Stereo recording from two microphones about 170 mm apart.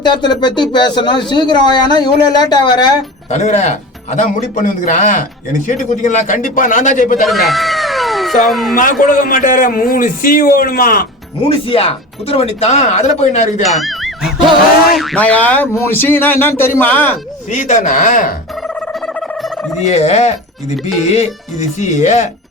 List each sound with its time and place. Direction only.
0.0 s speech: 25° left (ahead or behind)
3.2 s a man's voice: 40° left (ahead or behind)
7.3 s cat: centre (ahead or behind)
8.7 s a man's voice: 55° left (ahead or behind)
11.4 s speech: 35° left (ahead or behind)
13.6 s speech: centre (ahead or behind)
17.5 s a man's voice: 45° left (ahead or behind)
19.0 s a sound: centre (ahead or behind)
19.8 s a man's voice: 40° left (ahead or behind)